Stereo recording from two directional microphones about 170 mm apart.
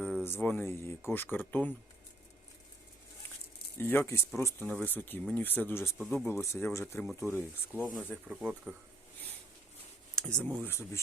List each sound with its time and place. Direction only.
0.0 s speech: 5° left (ahead or behind)
3.8 s speech: 10° left (ahead or behind)
6.0 s speech: centre (ahead or behind)
6.2 s speech: 15° left (ahead or behind)
7.9 s speech: 5° right (ahead or behind)
10.2 s speech: 5° left (ahead or behind)